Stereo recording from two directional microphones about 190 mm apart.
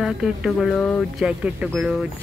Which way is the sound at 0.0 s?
5° right (ahead or behind).